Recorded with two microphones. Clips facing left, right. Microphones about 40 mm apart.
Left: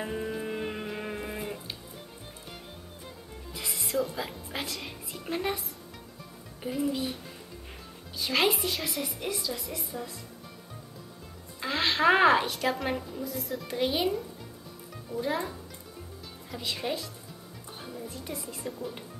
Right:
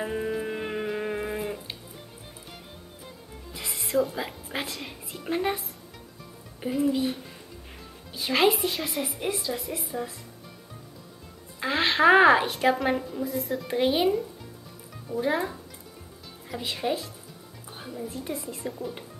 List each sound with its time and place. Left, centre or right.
0.0 s music: centre
3.5 s music: centre
4.8 s a woman's voice: centre
6.6 s a woman's voice: centre
8.4 s a woman's voice: centre
8.9 s a woman's voice: right
11.6 s music: centre
12.1 s a woman's voice: centre
12.4 s a woman's voice: right
12.7 s a woman's voice: centre
13.7 s a woman's voice: right
16.7 s a woman's voice: centre
18.1 s a woman's voice: centre